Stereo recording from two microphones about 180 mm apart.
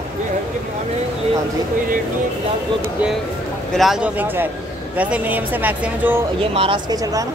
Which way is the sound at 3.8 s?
5° right (ahead or behind).